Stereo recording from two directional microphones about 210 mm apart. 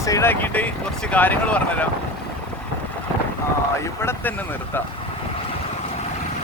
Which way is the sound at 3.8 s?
10° left (ahead or behind).